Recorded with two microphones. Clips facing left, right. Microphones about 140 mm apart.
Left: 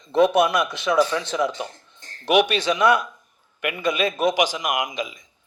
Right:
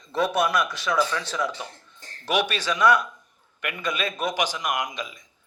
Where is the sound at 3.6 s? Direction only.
5° left (ahead or behind).